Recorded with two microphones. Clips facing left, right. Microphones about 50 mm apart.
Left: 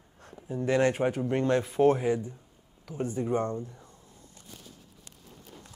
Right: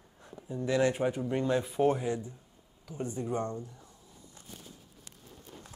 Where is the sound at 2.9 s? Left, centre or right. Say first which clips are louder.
Left 5 dB; left.